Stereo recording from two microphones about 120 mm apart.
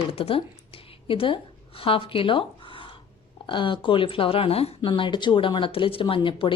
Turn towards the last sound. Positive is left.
turn(degrees=45)  # may be behind; listen again after turning